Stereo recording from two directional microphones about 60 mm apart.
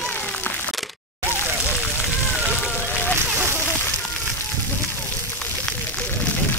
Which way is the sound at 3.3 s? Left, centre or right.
Right.